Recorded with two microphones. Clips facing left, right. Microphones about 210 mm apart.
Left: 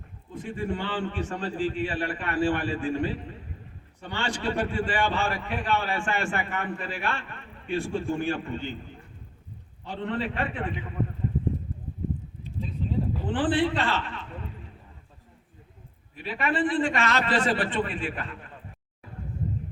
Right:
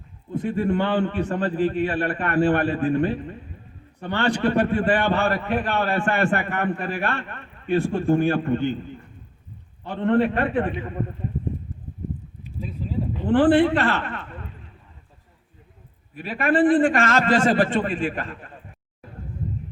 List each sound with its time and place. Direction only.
0.3 s a man's voice: 60° right (ahead or behind)
9.8 s a man's voice: 60° right (ahead or behind)
11.7 s a sound: 55° left (ahead or behind)
12.4 s a sound: 10° right (ahead or behind)
13.2 s a man's voice: 60° right (ahead or behind)
16.1 s a man's voice: 50° right (ahead or behind)